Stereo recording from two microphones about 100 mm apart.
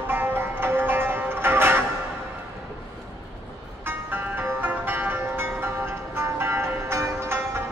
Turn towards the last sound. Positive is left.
turn(degrees=-25)  # may be behind; listen again after turning